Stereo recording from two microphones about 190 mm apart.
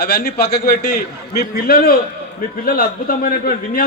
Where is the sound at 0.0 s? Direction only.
55° left (ahead or behind).